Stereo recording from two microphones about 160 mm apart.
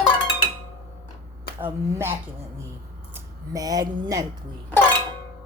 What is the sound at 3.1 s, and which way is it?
Speech, 20° right (ahead or behind).